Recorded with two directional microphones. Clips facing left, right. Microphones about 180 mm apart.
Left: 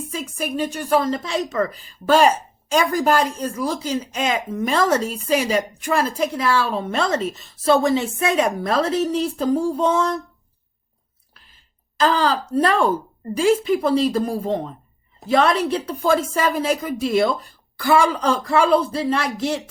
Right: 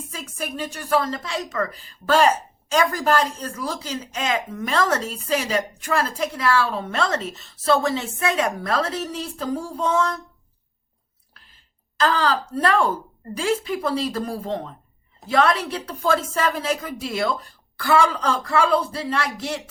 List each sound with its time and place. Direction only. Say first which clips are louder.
0.1 s a woman's voice: left 5 dB; 15° left (ahead or behind)
11.9 s a woman's voice: left 2 dB; 15° left (ahead or behind)